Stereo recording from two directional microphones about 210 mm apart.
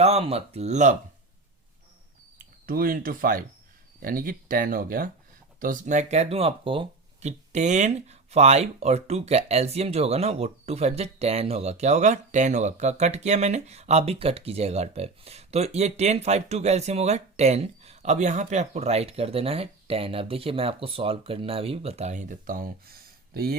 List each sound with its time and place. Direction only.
0.0 s speech: 30° right (ahead or behind)
2.6 s speech: 40° right (ahead or behind)